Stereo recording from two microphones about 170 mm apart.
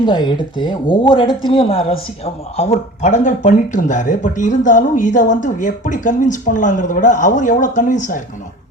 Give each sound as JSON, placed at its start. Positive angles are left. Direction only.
{"t": 0.0, "sound": "speech", "side_deg": 25}